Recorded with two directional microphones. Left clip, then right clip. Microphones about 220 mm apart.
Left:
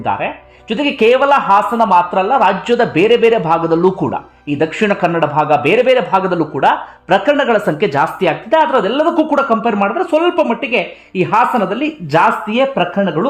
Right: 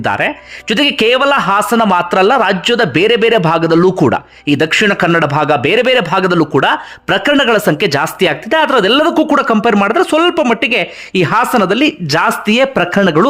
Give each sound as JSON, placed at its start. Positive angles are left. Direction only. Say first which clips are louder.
{"t": 0.7, "sound": "a man's voice", "louder": "right 1 dB", "side_deg": -20}